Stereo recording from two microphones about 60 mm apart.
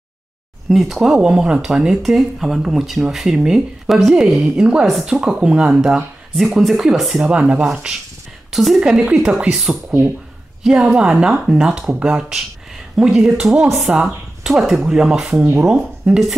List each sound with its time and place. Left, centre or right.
0.7 s speech: centre
6.3 s speech: centre
7.2 s speech: centre
8.5 s speech: centre